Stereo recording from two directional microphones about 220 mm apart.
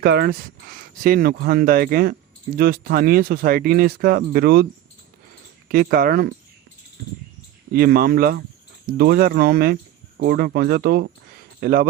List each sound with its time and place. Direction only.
0.0 s speech: 45° right (ahead or behind)
5.6 s speech: 40° right (ahead or behind)
7.7 s speech: 40° right (ahead or behind)